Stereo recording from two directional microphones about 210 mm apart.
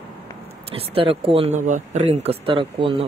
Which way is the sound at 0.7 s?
25° right (ahead or behind).